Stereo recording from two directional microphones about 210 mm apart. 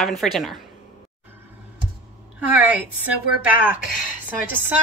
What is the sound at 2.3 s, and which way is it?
A woman's voice, 5° right (ahead or behind).